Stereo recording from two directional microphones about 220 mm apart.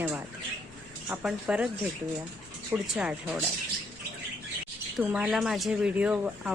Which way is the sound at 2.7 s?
5° right (ahead or behind).